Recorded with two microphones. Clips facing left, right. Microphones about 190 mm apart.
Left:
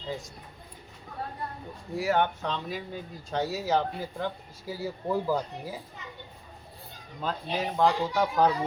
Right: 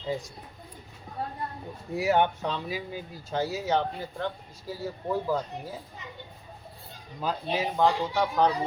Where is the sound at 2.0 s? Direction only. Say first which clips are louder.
Right 2 dB; 15° right (ahead or behind); by 4.9 s 5° left (ahead or behind).